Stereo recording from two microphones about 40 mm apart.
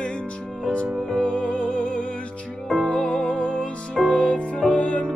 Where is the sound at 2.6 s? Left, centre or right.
Centre.